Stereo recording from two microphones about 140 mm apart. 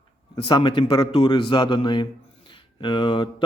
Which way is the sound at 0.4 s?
30° left (ahead or behind).